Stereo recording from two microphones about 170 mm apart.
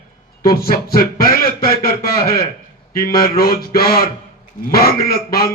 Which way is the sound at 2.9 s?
60° left (ahead or behind).